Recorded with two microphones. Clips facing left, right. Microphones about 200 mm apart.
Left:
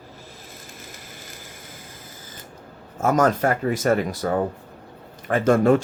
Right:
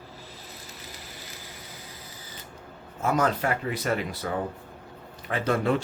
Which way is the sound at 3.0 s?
45° left (ahead or behind).